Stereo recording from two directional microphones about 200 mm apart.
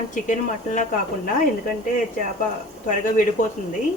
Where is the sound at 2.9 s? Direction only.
40° left (ahead or behind).